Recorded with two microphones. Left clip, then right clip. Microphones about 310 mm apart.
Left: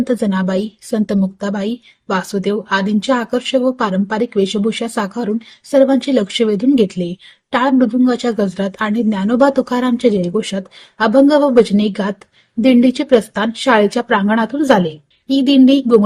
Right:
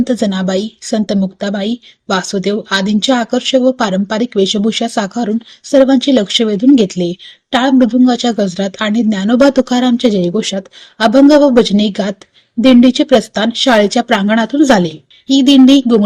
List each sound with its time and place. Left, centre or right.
0.0 s speech: centre